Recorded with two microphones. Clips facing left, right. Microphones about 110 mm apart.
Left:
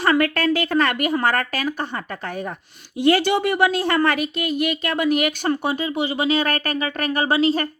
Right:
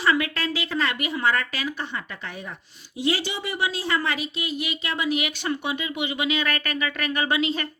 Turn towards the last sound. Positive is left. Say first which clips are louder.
# left 6 dB
turn(degrees=40)  # may be behind; listen again after turning